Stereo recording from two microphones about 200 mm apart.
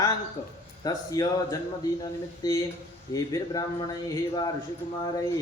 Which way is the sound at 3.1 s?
20° left (ahead or behind).